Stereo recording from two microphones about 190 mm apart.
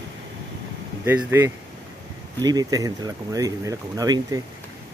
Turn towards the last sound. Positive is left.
turn(degrees=-20)  # may be behind; listen again after turning